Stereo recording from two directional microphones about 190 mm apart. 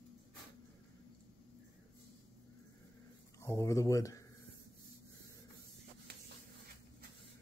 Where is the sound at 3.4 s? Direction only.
15° left (ahead or behind).